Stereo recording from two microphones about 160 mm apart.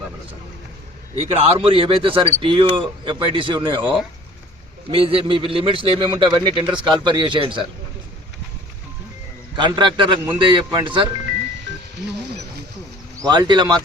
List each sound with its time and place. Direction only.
1.1 s speech: 35° right (ahead or behind)
6.4 s speech: 35° left (ahead or behind)
6.8 s speech: 30° right (ahead or behind)
9.6 s speech: 30° right (ahead or behind)
11.7 s music: 90° right
13.2 s speech: 25° right (ahead or behind)